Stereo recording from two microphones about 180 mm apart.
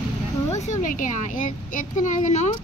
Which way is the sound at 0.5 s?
40° left (ahead or behind).